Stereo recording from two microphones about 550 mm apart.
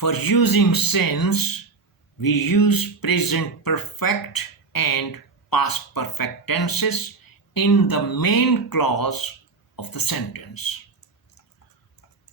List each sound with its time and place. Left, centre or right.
0.0 s speech: left